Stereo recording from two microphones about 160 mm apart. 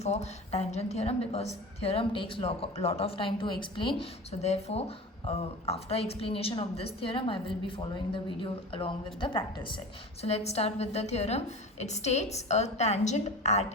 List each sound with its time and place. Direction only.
0.0 s a woman's voice: 45° left (ahead or behind)